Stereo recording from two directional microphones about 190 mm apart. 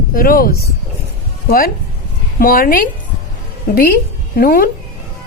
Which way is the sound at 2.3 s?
50° left (ahead or behind).